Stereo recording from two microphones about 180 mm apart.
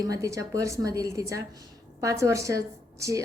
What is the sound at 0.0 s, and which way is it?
A woman's voice, 20° right (ahead or behind).